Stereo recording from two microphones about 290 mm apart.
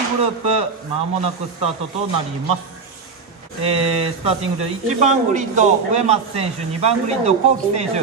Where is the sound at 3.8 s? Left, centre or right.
Centre.